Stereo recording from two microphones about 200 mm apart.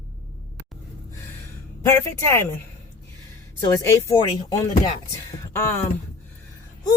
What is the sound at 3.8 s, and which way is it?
Speech, 15° left (ahead or behind).